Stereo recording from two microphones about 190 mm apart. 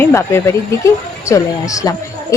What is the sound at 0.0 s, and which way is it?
Speech, 15° left (ahead or behind).